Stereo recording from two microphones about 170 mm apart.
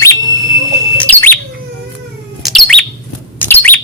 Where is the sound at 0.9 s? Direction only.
10° left (ahead or behind).